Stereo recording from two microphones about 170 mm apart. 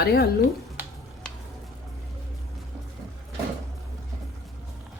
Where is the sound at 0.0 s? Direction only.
70° left (ahead or behind).